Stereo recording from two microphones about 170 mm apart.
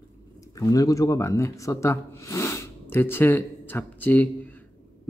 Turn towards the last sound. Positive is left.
turn(degrees=10)  # may be behind; listen again after turning